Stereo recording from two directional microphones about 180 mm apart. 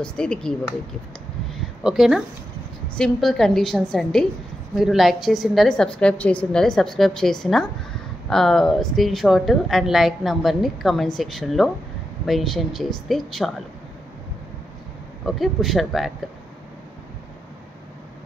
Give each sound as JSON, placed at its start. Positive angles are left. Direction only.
{"t": 0.0, "sound": "a woman's voice", "side_deg": 5}
{"t": 1.5, "sound": "a sound", "side_deg": -5}
{"t": 3.0, "sound": "a woman's voice", "side_deg": 0}
{"t": 15.2, "sound": "a woman's voice", "side_deg": 0}